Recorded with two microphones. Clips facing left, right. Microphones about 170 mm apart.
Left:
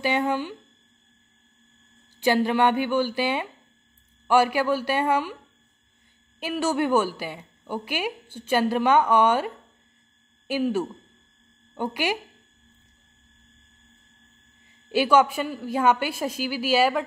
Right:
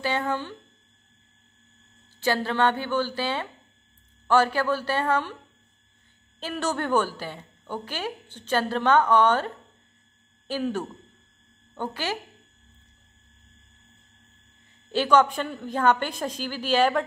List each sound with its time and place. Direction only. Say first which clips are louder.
0.0 s a woman's voice: left 3 dB; 15° left (ahead or behind)
2.1 s a woman's voice: left 4 dB; 15° left (ahead or behind)
6.4 s a woman's voice: left 4 dB; 10° left (ahead or behind)
10.5 s a woman's voice: left 4 dB; 10° left (ahead or behind)
14.9 s a woman's voice: left 1 dB; 10° left (ahead or behind)